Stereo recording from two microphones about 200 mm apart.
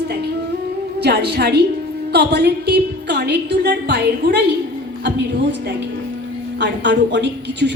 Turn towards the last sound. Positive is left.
turn(degrees=-60)  # may be behind; listen again after turning